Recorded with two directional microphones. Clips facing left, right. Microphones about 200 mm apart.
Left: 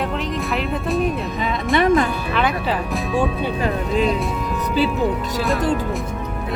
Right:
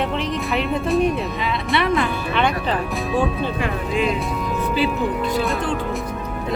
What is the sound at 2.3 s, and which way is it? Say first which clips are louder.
Speech: right 1 dB; centre (ahead or behind).